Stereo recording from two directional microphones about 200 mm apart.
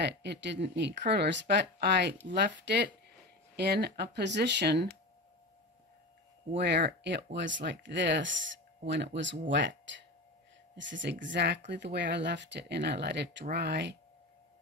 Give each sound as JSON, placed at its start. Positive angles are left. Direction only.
{"t": 0.0, "sound": "speech", "side_deg": -60}
{"t": 6.5, "sound": "speech", "side_deg": -60}